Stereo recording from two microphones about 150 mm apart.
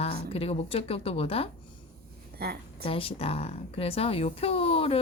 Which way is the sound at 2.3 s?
90° right.